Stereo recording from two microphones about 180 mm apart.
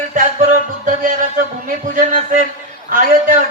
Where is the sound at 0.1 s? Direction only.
45° right (ahead or behind).